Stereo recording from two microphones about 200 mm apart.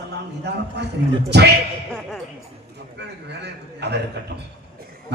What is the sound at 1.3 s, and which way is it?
Speech, 55° right (ahead or behind).